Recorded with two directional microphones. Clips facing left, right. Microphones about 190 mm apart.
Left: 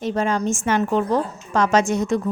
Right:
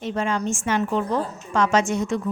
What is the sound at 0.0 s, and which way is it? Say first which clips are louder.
A woman's voice: left 3 dB; 40° left (ahead or behind).